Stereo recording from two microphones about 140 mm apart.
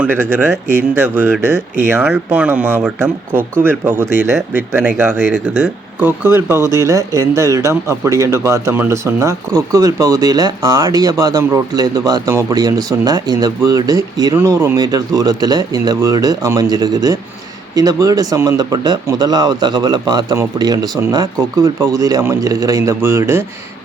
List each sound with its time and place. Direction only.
0.0 s speech: 15° right (ahead or behind)